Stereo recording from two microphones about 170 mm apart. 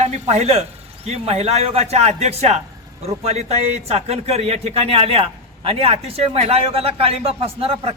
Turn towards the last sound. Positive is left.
turn(degrees=-35)  # may be behind; listen again after turning